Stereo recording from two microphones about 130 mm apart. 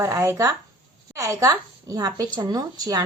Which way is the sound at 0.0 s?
20° right (ahead or behind).